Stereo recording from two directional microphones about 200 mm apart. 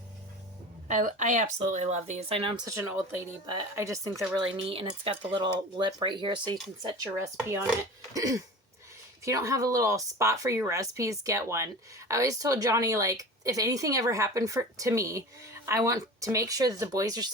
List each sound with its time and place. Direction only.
0.9 s speech: 40° right (ahead or behind)
2.6 s speech: 10° right (ahead or behind)
4.5 s speech: 30° right (ahead or behind)